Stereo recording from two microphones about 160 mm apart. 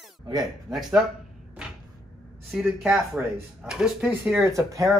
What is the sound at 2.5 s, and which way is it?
Speech, centre (ahead or behind).